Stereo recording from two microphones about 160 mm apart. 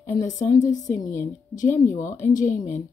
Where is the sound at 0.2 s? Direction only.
50° left (ahead or behind).